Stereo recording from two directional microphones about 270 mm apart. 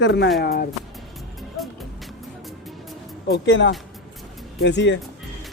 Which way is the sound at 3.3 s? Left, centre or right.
Left.